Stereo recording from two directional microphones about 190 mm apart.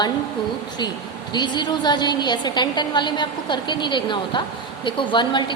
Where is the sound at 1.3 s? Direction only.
20° left (ahead or behind).